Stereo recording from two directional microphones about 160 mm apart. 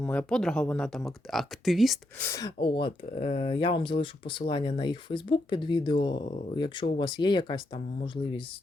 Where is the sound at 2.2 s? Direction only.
20° left (ahead or behind).